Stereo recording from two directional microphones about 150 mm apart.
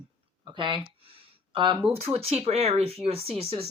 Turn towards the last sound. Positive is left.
turn(degrees=-40)  # may be behind; listen again after turning